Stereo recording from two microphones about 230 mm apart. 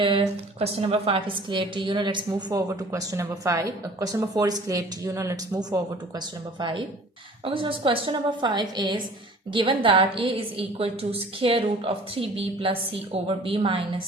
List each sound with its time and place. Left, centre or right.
0.0 s a woman's voice: right